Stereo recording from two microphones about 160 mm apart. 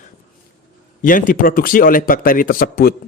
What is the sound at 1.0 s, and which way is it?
Speech, 55° left (ahead or behind).